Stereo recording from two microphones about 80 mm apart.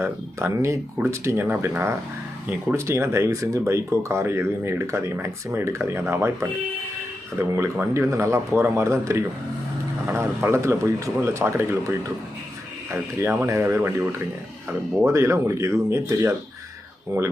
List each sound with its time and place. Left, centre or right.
0.0 s speech: right
17.1 s speech: right